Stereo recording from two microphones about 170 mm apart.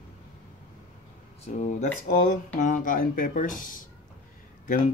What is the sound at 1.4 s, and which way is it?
Speech, 45° left (ahead or behind).